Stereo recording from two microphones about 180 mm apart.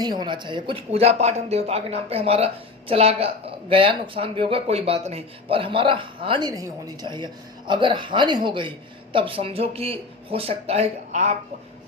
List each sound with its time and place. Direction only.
0.0 s a man's voice: 25° right (ahead or behind); by 11.3 s 40° right (ahead or behind)